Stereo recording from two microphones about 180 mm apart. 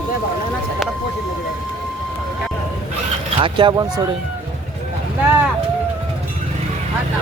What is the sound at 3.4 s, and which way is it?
Speech, 25° right (ahead or behind).